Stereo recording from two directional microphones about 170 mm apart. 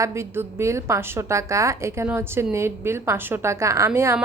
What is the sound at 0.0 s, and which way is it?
A woman's voice, 15° right (ahead or behind).